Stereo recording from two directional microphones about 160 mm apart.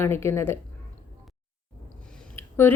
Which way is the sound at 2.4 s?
15° left (ahead or behind).